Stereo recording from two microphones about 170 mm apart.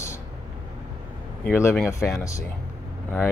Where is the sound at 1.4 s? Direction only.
15° left (ahead or behind).